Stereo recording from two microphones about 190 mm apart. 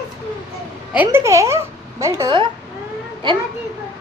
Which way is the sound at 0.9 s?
10° right (ahead or behind).